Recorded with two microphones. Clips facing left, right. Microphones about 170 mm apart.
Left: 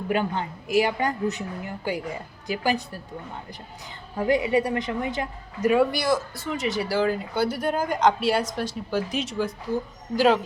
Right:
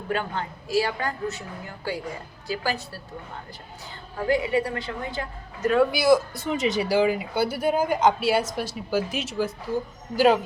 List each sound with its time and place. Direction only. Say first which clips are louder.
0.1 s a woman's voice: left 2 dB; 20° left (ahead or behind)
4.2 s a woman's voice: left 1 dB; 20° left (ahead or behind)
5.9 s speech: right 5 dB; 5° right (ahead or behind)
6.3 s a man's voice: right 3 dB; 20° right (ahead or behind)